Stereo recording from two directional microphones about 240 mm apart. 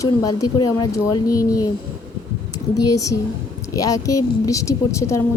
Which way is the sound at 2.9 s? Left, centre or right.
Centre.